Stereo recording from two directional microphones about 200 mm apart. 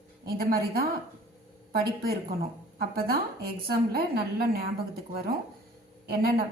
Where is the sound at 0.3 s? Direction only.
50° right (ahead or behind).